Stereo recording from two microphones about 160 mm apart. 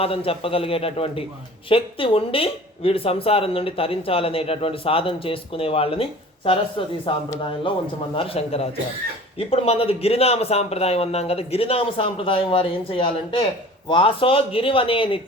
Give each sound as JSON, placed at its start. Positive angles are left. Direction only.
{"t": 0.0, "sound": "a man's voice", "side_deg": 35}
{"t": 8.1, "sound": "a man's voice", "side_deg": 35}